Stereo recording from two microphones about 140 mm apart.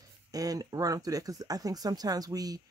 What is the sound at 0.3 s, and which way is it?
Speech, 25° right (ahead or behind).